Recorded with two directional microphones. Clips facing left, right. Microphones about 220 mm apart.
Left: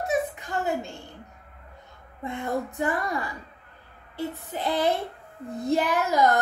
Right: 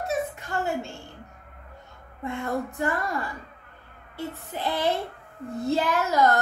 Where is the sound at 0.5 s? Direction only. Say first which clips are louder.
Even; 20° left (ahead or behind).